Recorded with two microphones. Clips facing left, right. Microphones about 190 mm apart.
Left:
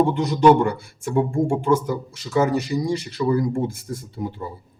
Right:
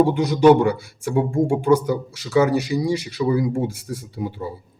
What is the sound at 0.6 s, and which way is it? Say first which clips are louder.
Speech: right 2 dB; 70° right (ahead or behind).